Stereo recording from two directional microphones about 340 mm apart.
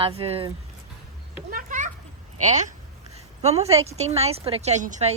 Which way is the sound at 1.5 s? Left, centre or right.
Right.